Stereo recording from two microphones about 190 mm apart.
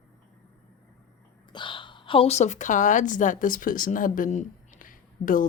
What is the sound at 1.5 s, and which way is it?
A woman's voice, 25° left (ahead or behind).